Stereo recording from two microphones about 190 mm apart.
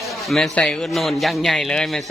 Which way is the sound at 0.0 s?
Centre (ahead or behind).